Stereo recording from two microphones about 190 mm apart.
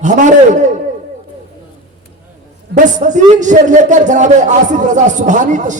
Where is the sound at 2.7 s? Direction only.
40° right (ahead or behind).